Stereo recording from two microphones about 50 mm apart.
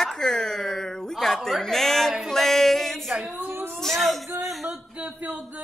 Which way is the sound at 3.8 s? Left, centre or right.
Centre.